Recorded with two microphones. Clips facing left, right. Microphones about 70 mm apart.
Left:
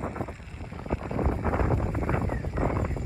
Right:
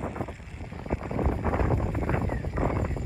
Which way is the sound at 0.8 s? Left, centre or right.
Centre.